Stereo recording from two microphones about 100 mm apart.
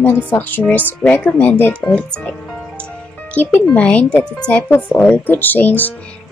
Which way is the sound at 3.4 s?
15° left (ahead or behind).